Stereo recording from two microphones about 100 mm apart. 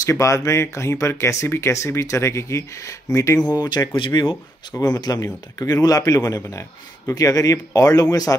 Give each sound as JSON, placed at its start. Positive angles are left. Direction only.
{"t": 0.0, "sound": "speech", "side_deg": 35}
{"t": 3.5, "sound": "speech", "side_deg": 45}
{"t": 4.7, "sound": "speech", "side_deg": 35}